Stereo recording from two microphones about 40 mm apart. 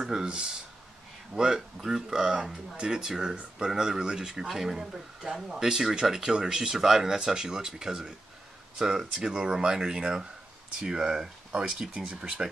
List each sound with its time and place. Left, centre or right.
0.0 s a sound: centre
1.3 s speech: centre
4.5 s speech: centre